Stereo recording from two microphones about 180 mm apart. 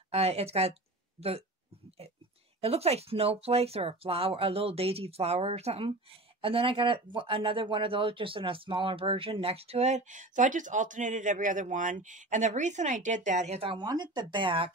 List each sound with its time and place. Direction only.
0.1 s speech: 35° right (ahead or behind)
2.6 s speech: 35° right (ahead or behind)